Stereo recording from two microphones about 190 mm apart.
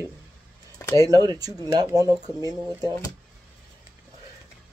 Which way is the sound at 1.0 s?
20° right (ahead or behind).